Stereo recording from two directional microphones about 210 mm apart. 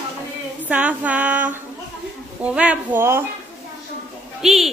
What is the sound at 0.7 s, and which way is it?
A woman's voice, 5° right (ahead or behind).